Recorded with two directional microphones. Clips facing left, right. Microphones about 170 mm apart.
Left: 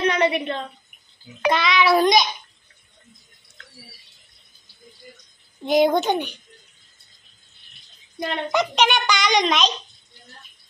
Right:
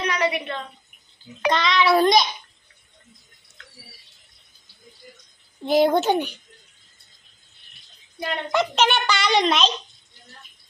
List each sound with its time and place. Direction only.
0.0 s a sound: 25° left (ahead or behind)
1.5 s a child's voice: 5° left (ahead or behind)
5.7 s a child's voice: 5° right (ahead or behind)
8.2 s a child's voice: centre (ahead or behind)